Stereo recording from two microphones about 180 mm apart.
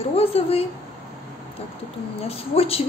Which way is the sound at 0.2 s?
35° left (ahead or behind).